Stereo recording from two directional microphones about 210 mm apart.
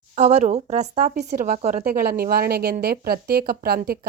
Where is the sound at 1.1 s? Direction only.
50° right (ahead or behind).